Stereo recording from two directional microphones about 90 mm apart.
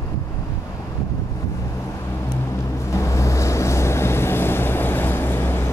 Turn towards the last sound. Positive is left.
turn(degrees=25)  # may be behind; listen again after turning